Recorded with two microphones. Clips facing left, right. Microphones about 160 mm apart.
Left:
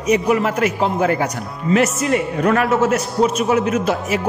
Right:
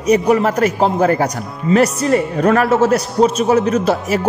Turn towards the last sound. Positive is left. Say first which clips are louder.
# right 3 dB
turn(degrees=-35)  # may be behind; listen again after turning